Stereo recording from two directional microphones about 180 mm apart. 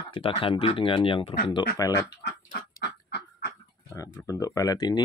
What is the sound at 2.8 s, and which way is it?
Fowl, 65° left (ahead or behind).